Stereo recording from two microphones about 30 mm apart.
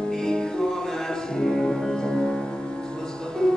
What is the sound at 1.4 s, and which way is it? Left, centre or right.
Music, centre.